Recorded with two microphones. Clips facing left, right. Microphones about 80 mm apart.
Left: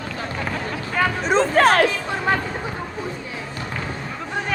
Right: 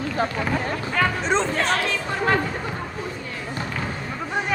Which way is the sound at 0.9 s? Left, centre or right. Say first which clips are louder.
Left 2 dB; centre.